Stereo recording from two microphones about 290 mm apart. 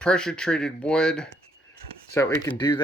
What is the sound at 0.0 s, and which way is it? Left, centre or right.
Speech, centre.